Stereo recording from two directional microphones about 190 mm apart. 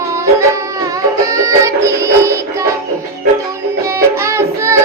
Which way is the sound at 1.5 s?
15° right (ahead or behind).